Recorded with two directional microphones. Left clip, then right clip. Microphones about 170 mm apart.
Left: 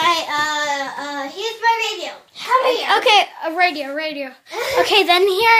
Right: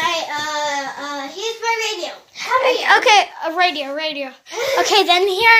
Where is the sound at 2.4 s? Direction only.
Centre (ahead or behind).